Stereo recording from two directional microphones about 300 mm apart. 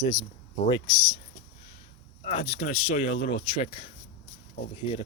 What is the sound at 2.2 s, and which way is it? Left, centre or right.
Speech, left.